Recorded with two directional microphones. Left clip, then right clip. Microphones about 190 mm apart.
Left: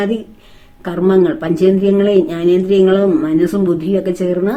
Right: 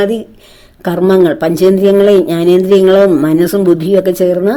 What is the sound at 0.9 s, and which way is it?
Speech, 40° right (ahead or behind).